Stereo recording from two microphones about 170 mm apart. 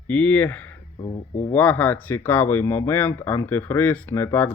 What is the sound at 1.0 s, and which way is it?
Speech, 45° left (ahead or behind).